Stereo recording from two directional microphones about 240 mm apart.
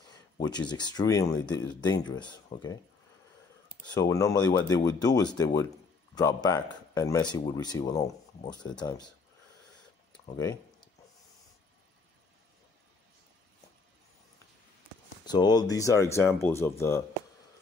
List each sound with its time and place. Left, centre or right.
0.1 s speech: centre
3.8 s speech: centre
10.3 s speech: centre
15.2 s speech: centre